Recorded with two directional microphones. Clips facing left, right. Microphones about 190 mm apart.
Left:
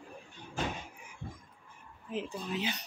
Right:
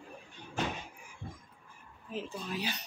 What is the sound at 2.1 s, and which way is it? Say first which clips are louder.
Speech: left 2 dB; 20° left (ahead or behind).